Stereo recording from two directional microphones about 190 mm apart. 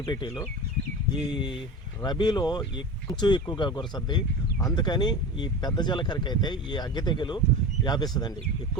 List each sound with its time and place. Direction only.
0.0 s speech: 25° left (ahead or behind)